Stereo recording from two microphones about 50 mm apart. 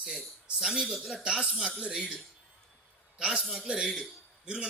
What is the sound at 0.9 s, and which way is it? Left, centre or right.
Speech, centre.